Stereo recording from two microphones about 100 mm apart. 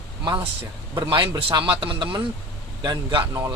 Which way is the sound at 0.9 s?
45° right (ahead or behind).